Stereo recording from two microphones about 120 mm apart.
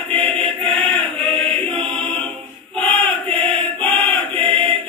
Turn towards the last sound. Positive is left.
turn(degrees=5)  # may be behind; listen again after turning